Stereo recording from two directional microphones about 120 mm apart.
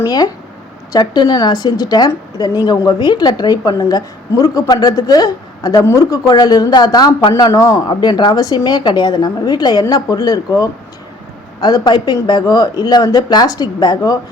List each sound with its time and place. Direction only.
0.9 s a woman's voice: 35° left (ahead or behind)